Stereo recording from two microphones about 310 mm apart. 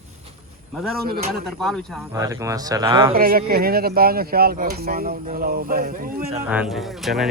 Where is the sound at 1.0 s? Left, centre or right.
Right.